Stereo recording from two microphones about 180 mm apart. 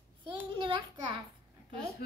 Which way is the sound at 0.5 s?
25° right (ahead or behind).